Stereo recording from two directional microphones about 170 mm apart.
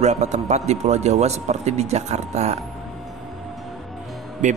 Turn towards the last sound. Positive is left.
turn(degrees=-45)  # may be behind; listen again after turning